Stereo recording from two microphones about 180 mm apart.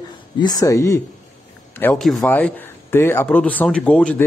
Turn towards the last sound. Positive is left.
turn(degrees=10)  # may be behind; listen again after turning